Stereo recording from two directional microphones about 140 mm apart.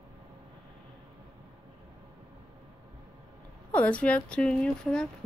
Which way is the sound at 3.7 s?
10° left (ahead or behind).